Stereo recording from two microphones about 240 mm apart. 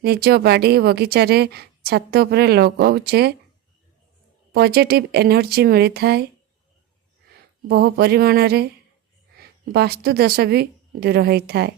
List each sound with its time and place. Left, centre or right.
0.0 s a woman's voice: right
4.5 s a woman's voice: right
7.7 s a woman's voice: right